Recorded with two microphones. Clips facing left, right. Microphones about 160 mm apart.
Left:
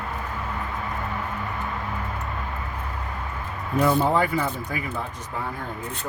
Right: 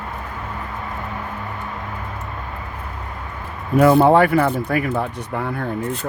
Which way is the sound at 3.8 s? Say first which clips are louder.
Right 8 dB; 65° right (ahead or behind).